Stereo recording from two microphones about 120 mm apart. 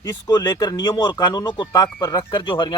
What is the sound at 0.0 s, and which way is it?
Speech, 35° left (ahead or behind).